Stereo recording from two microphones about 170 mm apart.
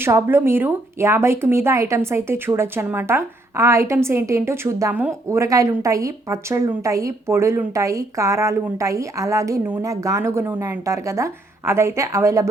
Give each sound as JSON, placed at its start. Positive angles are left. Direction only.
{"t": 0.0, "sound": "speech", "side_deg": -15}